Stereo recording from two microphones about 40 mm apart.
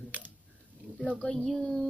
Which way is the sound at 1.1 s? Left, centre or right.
Centre.